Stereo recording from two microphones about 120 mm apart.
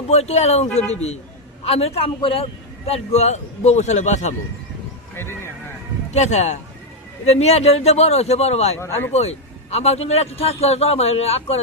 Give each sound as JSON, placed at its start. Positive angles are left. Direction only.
{"t": 0.1, "sound": "a man's voice", "side_deg": 65}
{"t": 5.1, "sound": "speech", "side_deg": 20}
{"t": 6.1, "sound": "a man's voice", "side_deg": 70}
{"t": 8.8, "sound": "speech", "side_deg": 20}
{"t": 9.1, "sound": "a man's voice", "side_deg": 65}